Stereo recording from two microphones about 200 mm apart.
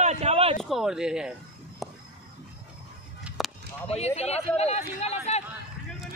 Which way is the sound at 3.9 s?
30° left (ahead or behind).